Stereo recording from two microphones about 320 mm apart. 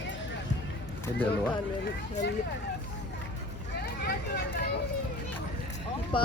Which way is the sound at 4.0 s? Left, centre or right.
Left.